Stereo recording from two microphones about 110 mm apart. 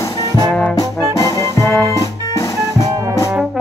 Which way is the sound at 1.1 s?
30° left (ahead or behind).